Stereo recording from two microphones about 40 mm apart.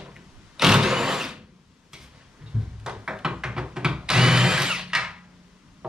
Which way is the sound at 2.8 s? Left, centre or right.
Centre.